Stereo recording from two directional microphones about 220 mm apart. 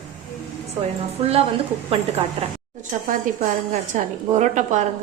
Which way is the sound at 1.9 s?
25° right (ahead or behind).